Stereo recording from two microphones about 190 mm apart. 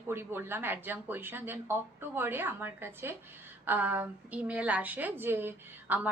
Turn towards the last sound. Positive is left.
turn(degrees=-10)  # may be behind; listen again after turning